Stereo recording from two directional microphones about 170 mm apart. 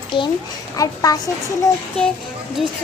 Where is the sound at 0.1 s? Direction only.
30° left (ahead or behind).